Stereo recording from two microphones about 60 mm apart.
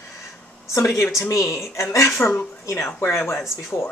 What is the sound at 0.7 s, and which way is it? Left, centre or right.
A woman's voice, left.